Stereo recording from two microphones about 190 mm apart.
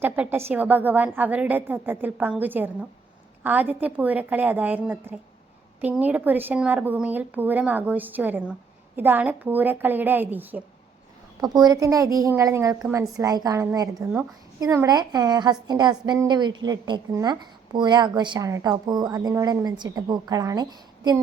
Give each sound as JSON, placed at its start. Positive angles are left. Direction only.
{"t": 0.0, "sound": "a woman's voice", "side_deg": -10}
{"t": 11.3, "sound": "a woman's voice", "side_deg": -20}